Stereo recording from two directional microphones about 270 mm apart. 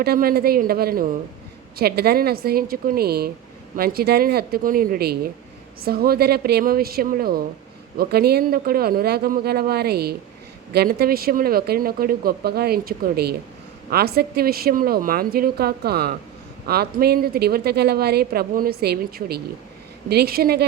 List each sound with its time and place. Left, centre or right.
0.0 s a woman's voice: right